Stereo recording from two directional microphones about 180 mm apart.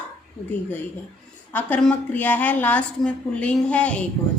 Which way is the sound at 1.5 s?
10° left (ahead or behind).